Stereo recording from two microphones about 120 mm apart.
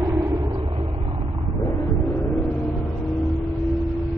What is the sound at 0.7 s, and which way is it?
Vehicle, 50° right (ahead or behind).